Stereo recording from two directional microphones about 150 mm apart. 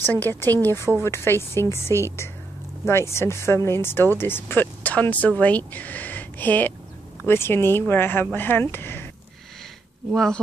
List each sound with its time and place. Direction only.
0.0 s speech: 15° left (ahead or behind)
10.1 s speech: centre (ahead or behind)